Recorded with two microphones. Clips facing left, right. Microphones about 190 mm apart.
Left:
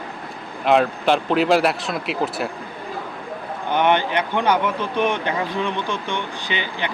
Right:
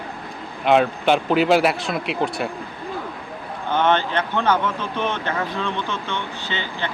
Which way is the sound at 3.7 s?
15° left (ahead or behind).